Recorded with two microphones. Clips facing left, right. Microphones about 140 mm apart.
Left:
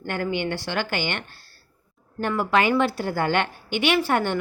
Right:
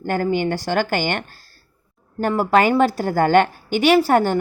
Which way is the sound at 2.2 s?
40° right (ahead or behind).